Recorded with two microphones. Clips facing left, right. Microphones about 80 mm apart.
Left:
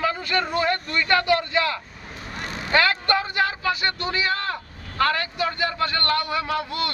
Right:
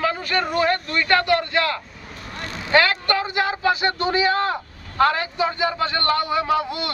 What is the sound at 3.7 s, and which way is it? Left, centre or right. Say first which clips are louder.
A man's voice: right 5 dB; right.